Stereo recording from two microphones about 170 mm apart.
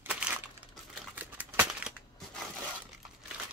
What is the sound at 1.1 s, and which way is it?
Crumpling, 10° right (ahead or behind).